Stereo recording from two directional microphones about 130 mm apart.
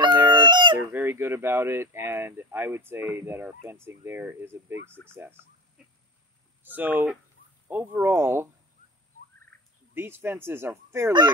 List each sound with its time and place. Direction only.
0.3 s fowl: 35° right (ahead or behind)
0.7 s speech: 15° right (ahead or behind)
6.6 s speech: 15° right (ahead or behind)
9.9 s speech: 15° right (ahead or behind)